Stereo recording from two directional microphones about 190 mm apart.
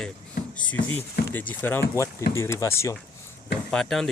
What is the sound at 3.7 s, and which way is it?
Speech, 5° left (ahead or behind).